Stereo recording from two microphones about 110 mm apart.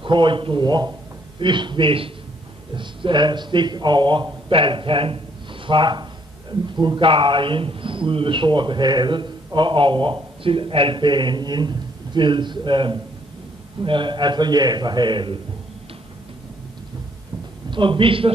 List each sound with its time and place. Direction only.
0.0 s a man's voice: 45° right (ahead or behind)
17.6 s speech: 50° right (ahead or behind)